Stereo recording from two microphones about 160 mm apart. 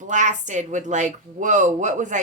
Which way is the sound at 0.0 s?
50° right (ahead or behind).